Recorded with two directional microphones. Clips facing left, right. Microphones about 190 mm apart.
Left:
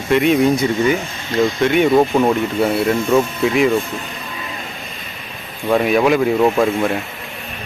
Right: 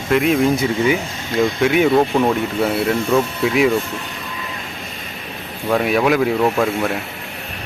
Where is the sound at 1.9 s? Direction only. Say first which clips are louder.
Left 2 dB; 5° left (ahead or behind).